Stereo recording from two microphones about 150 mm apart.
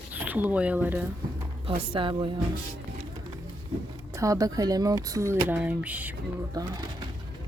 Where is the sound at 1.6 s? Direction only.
35° right (ahead or behind).